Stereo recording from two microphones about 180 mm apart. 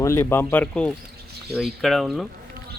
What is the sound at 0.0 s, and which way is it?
Speech, 15° left (ahead or behind).